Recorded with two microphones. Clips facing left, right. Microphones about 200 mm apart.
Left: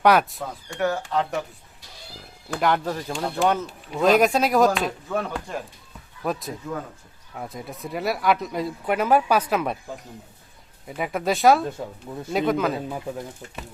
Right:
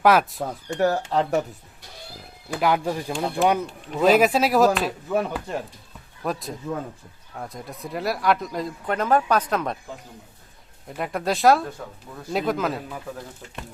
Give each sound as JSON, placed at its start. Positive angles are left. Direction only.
{"t": 0.0, "sound": "speech", "side_deg": 0}
{"t": 0.8, "sound": "speech", "side_deg": -35}
{"t": 2.5, "sound": "speech", "side_deg": -5}
{"t": 10.8, "sound": "speech", "side_deg": 5}
{"t": 11.6, "sound": "speech", "side_deg": 25}
{"t": 12.3, "sound": "speech", "side_deg": 0}